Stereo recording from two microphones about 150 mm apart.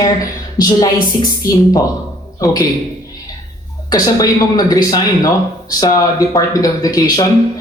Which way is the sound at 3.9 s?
25° left (ahead or behind).